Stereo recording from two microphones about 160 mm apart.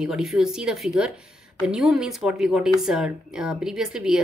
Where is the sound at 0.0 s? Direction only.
5° right (ahead or behind).